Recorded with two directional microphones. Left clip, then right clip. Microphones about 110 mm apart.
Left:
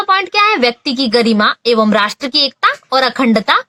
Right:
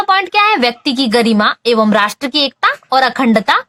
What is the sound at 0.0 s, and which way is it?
Speech, 25° right (ahead or behind).